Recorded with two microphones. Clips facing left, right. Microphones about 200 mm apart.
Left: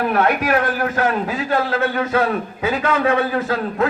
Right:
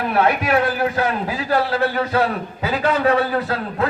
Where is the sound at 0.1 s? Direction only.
30° right (ahead or behind).